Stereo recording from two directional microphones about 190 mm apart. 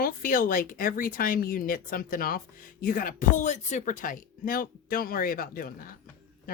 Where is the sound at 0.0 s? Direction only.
50° left (ahead or behind).